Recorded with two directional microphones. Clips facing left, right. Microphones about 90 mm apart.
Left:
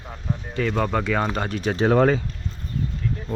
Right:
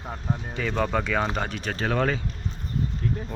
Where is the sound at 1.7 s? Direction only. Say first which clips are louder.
Left 8 dB; 30° left (ahead or behind).